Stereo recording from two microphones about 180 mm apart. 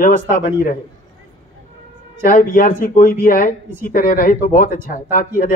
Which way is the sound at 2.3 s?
50° left (ahead or behind).